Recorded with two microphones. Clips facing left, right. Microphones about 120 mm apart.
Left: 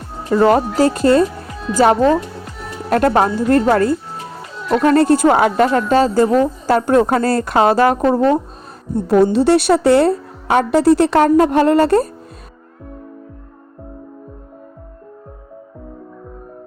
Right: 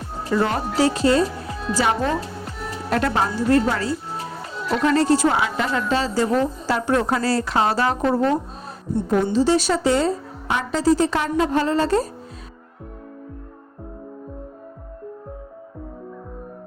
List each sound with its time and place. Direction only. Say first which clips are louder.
0.3 s speech: left 9 dB; 40° left (ahead or behind)
4.5 s music: left 6 dB; centre (ahead or behind)
4.9 s speech: left 6 dB; 50° left (ahead or behind)
9.3 s a woman's voice: left 6 dB; 65° left (ahead or behind)